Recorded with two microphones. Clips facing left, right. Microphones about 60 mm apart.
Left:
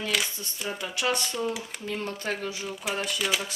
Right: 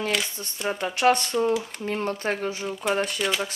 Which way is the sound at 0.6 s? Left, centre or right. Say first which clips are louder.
Right 8 dB; right.